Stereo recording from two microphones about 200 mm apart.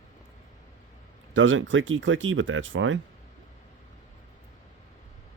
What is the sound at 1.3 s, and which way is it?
Speech, 70° right (ahead or behind).